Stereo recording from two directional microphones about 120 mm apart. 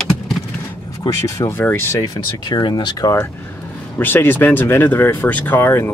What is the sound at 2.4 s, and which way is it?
Speech, 40° left (ahead or behind).